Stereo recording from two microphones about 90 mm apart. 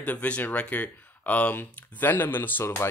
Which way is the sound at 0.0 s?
15° left (ahead or behind).